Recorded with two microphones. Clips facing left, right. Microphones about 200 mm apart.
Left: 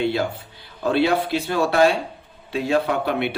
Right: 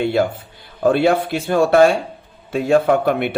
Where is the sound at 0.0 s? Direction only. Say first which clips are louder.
Right 4 dB; 50° right (ahead or behind).